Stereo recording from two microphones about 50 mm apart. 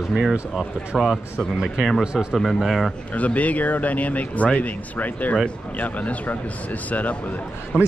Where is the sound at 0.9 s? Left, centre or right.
Centre.